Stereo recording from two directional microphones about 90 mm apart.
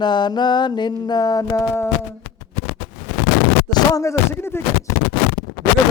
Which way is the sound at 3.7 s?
40° left (ahead or behind).